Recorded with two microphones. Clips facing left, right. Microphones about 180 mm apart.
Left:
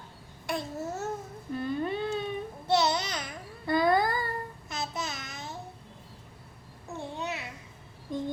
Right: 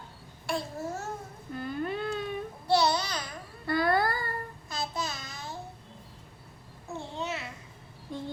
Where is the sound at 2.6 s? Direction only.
20° left (ahead or behind).